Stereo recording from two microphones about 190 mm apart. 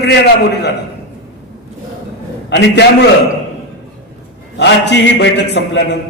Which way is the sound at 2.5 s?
65° left (ahead or behind).